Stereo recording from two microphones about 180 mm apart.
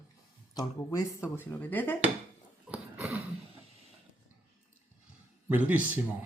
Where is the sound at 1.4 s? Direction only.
10° left (ahead or behind).